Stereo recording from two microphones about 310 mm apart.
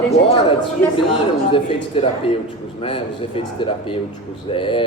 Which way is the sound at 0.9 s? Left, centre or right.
Centre.